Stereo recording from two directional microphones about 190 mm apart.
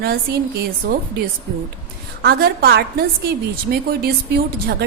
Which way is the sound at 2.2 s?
55° right (ahead or behind).